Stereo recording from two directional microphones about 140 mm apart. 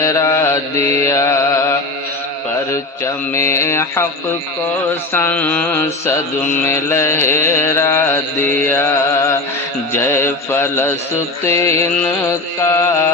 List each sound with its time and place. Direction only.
0.0 s mantra: 20° left (ahead or behind)
3.5 s mantra: 20° left (ahead or behind)